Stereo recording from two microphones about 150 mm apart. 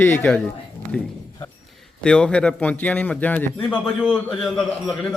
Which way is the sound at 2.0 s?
5° left (ahead or behind).